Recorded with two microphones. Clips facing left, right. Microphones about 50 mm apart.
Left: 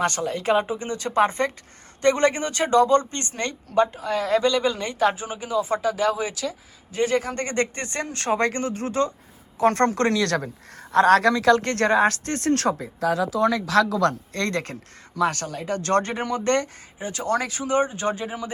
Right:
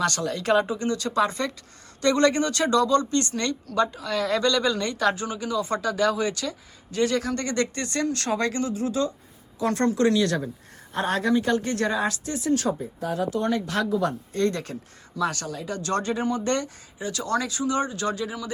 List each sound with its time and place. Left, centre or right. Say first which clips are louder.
0.0 s speech: left 2 dB; left; by 6.6 s centre
6.9 s speech: left 1 dB; left
11.7 s speech: left 6 dB; left
17.0 s speech: left 2 dB; left
17.7 s speech: left 7 dB; left